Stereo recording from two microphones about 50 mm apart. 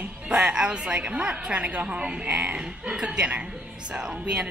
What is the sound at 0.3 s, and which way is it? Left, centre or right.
A woman's voice, centre.